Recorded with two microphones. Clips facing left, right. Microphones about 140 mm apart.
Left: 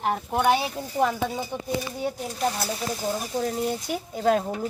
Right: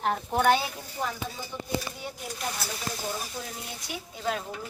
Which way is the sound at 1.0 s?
70° left (ahead or behind).